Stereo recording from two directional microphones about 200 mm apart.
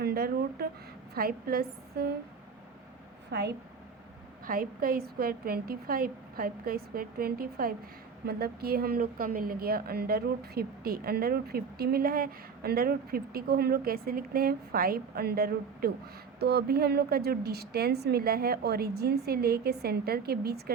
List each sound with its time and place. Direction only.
0.0 s a woman's voice: 50° right (ahead or behind)
3.3 s a woman's voice: 55° right (ahead or behind)